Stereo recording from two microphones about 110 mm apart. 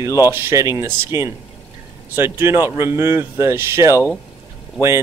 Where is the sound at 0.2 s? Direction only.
20° right (ahead or behind).